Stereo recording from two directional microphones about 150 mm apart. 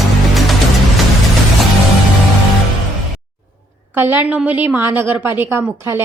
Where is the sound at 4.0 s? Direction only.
15° right (ahead or behind).